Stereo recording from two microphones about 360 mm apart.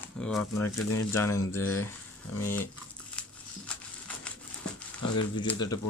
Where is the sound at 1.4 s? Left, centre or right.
Left.